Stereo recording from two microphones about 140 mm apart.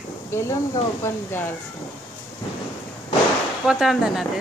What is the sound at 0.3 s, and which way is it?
Speech, 20° left (ahead or behind).